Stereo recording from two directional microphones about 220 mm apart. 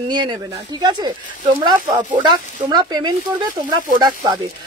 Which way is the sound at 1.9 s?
35° right (ahead or behind).